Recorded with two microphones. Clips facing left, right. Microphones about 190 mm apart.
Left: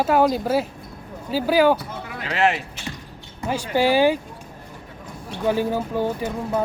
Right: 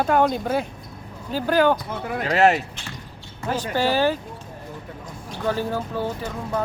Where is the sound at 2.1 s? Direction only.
40° right (ahead or behind).